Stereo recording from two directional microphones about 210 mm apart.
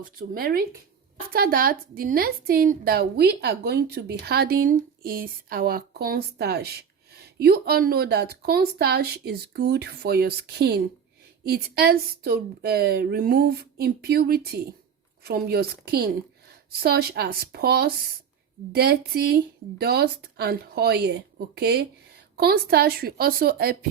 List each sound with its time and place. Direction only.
0.0 s a woman's voice: 45° right (ahead or behind)